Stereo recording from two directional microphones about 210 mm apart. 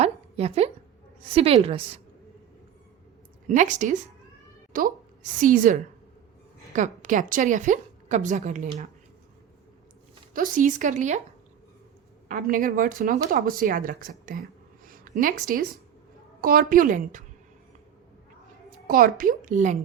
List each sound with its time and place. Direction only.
0.0 s a sound: 30° right (ahead or behind)
1.4 s a woman's voice: 30° right (ahead or behind)
3.5 s speech: 35° right (ahead or behind)
6.7 s speech: 35° right (ahead or behind)
10.3 s speech: 40° right (ahead or behind)
12.3 s speech: 40° right (ahead or behind)
18.9 s speech: 40° right (ahead or behind)